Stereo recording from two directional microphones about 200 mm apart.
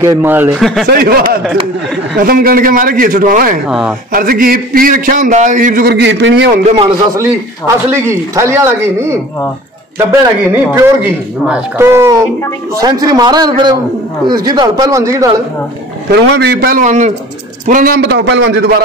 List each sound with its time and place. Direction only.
0.0 s speech: 10° right (ahead or behind)
0.6 s speech: centre (ahead or behind)
0.8 s a man's voice: 50° right (ahead or behind)
3.6 s speech: 5° right (ahead or behind)
4.1 s a man's voice: 45° right (ahead or behind); by 6.6 s 60° right (ahead or behind)
6.6 s speech: 25° right (ahead or behind)
7.2 s speech: 15° right (ahead or behind)
10.5 s speech: 10° right (ahead or behind)
16.3 s a man's voice: 50° right (ahead or behind)